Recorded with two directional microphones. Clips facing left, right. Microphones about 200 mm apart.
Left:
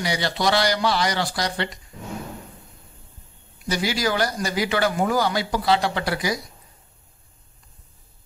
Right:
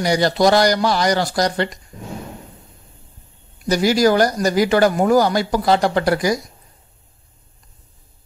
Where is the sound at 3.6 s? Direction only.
45° right (ahead or behind).